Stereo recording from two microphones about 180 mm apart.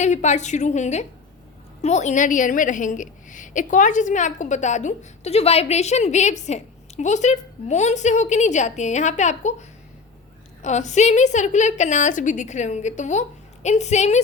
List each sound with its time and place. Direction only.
0.0 s a woman's voice: 40° left (ahead or behind)